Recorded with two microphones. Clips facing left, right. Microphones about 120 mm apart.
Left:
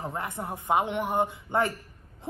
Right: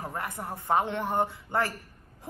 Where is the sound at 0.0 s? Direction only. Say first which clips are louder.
Left 2 dB; 20° left (ahead or behind).